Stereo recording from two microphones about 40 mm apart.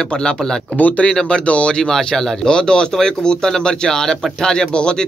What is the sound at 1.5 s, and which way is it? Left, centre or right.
Speech, left.